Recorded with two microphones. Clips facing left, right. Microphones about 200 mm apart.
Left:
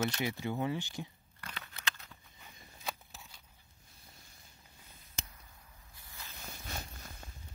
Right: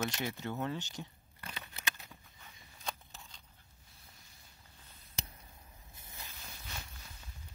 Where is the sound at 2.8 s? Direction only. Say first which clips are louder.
Left 1 dB; 5° left (ahead or behind).